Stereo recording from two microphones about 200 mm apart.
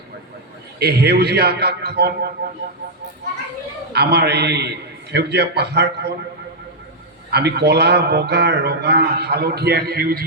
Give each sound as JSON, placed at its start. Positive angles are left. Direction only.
{"t": 0.8, "sound": "a man's voice", "side_deg": -55}
{"t": 3.9, "sound": "a man's voice", "side_deg": -55}
{"t": 7.3, "sound": "a man's voice", "side_deg": -55}